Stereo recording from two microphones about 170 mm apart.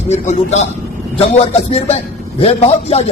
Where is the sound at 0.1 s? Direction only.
40° left (ahead or behind).